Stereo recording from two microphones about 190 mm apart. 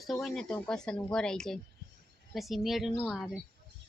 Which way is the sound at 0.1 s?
Centre (ahead or behind).